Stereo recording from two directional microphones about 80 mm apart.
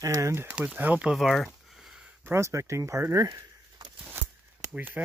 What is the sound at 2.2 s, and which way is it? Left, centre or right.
Speech, right.